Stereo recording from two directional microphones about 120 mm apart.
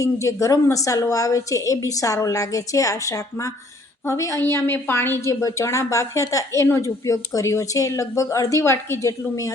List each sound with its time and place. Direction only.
0.0 s a woman's voice: 25° left (ahead or behind)